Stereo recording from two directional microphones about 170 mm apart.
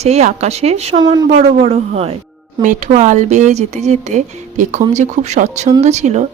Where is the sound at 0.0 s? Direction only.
40° right (ahead or behind).